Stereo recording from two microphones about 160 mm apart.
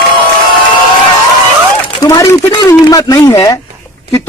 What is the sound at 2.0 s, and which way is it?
Speech, 20° left (ahead or behind).